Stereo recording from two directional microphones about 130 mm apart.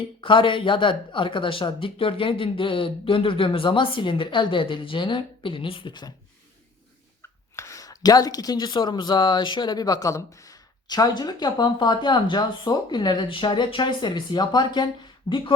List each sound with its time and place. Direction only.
0.0 s speech: 40° left (ahead or behind)
7.2 s speech: 20° left (ahead or behind)